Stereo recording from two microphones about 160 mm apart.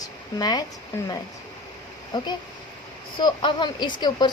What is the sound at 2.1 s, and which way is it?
Speech, 25° left (ahead or behind).